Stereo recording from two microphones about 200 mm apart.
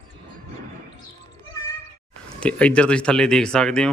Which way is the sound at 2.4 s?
5° left (ahead or behind).